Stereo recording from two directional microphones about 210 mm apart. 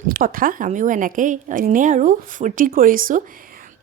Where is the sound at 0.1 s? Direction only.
40° right (ahead or behind).